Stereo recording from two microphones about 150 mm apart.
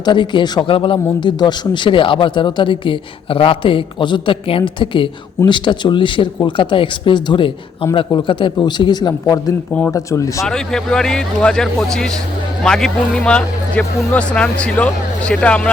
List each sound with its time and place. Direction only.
0.0 s a man's voice: 30° left (ahead or behind)
10.4 s a man's voice: 5° left (ahead or behind)